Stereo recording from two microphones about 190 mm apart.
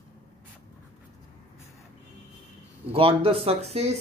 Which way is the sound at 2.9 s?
30° right (ahead or behind).